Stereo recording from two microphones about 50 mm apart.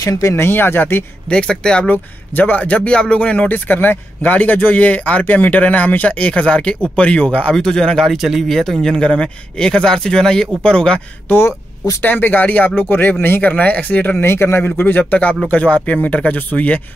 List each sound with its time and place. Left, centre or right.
0.2 s speech: left
0.5 s speech: left
1.3 s speech: centre
1.9 s speech: left
2.6 s speech: left
7.5 s speech: centre
8.2 s speech: centre
8.5 s speech: centre
11.2 s speech: left
12.0 s speech: left
14.2 s speech: left